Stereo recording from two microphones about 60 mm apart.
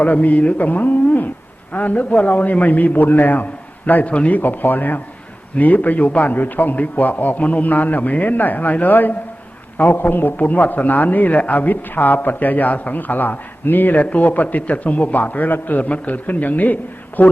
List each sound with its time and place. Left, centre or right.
0.0 s a man's voice: left